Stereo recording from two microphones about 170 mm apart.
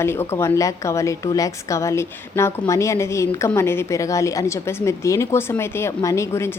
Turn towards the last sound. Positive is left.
turn(degrees=15)  # may be behind; listen again after turning